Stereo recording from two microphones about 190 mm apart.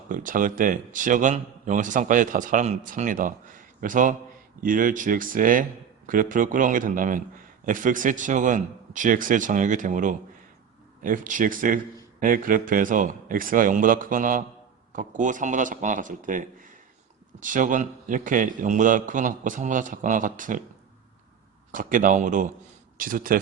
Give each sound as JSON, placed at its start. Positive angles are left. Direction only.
{"t": 0.1, "sound": "a man's voice", "side_deg": -45}
{"t": 21.7, "sound": "a man's voice", "side_deg": -45}